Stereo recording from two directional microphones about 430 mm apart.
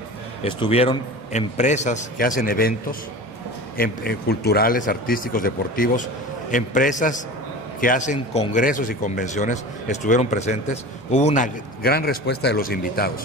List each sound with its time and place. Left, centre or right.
0.4 s a man's voice: centre